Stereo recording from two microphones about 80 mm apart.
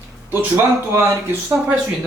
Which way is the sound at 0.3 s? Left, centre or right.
Right.